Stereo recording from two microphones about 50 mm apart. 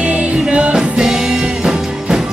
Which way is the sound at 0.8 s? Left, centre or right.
Centre.